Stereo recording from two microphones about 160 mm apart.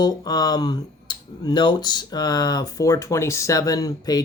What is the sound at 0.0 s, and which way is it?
Speech, 25° left (ahead or behind).